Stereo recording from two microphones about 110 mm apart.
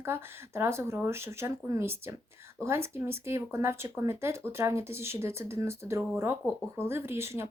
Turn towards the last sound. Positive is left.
turn(degrees=-25)  # may be behind; listen again after turning